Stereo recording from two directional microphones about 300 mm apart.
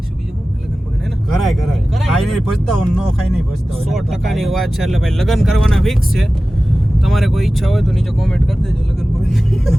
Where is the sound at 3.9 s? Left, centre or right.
Centre.